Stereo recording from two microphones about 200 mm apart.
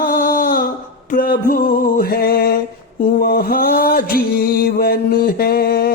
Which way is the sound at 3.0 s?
45° left (ahead or behind).